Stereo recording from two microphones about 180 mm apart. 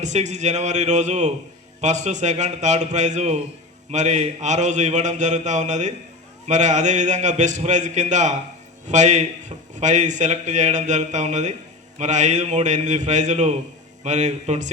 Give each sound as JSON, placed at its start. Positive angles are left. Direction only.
{"t": 0.0, "sound": "a man's voice", "side_deg": -40}